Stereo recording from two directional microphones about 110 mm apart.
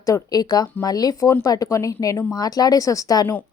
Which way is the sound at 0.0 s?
35° left (ahead or behind).